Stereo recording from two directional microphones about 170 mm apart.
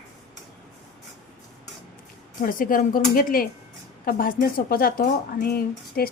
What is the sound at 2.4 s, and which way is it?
Speech, 55° left (ahead or behind).